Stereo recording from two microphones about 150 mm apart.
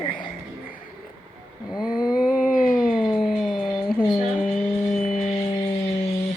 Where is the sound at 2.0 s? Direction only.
5° right (ahead or behind).